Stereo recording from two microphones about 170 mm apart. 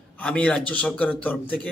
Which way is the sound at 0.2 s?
5° left (ahead or behind).